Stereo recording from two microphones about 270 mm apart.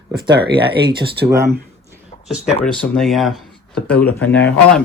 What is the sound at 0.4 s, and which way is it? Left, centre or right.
Speech, centre.